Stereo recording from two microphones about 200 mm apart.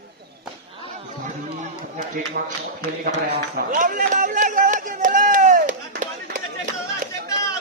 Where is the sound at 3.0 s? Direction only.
50° right (ahead or behind).